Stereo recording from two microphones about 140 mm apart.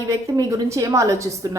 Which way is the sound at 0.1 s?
25° right (ahead or behind).